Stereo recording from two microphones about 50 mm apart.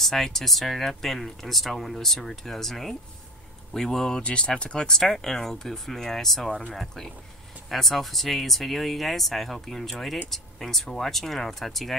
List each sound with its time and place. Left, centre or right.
0.0 s speech: centre
4.2 s speech: left; by 11.9 s centre